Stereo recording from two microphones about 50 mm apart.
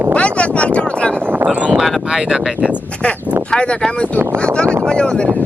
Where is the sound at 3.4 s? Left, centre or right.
Left.